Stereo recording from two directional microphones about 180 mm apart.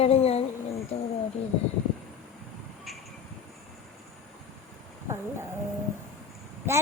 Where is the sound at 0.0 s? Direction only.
35° left (ahead or behind).